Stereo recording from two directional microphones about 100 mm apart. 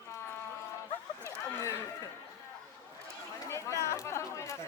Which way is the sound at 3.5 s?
30° left (ahead or behind).